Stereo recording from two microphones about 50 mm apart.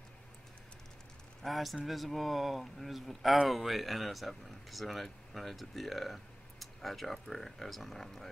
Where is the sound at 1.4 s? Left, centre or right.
Centre.